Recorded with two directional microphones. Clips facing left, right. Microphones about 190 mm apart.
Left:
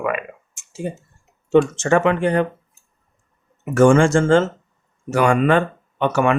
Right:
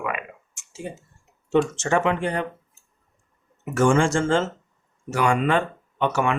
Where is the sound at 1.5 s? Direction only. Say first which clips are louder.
Left 5 dB; 60° left (ahead or behind).